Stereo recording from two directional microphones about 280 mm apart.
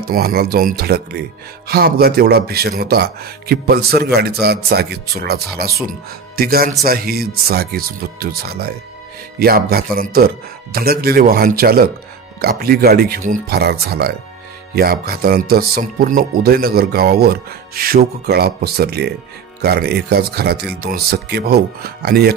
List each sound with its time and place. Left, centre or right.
0.1 s speech: right